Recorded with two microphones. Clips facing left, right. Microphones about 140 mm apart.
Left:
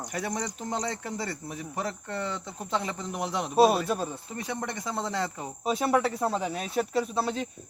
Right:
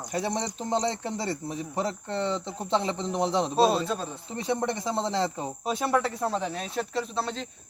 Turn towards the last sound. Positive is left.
turn(degrees=10)  # may be behind; listen again after turning